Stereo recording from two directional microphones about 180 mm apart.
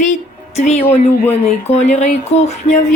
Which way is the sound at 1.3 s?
35° left (ahead or behind).